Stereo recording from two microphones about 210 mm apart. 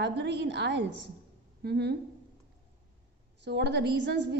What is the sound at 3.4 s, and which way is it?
Speech, 55° right (ahead or behind).